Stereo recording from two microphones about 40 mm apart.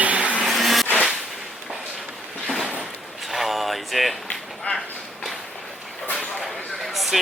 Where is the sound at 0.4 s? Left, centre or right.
Centre.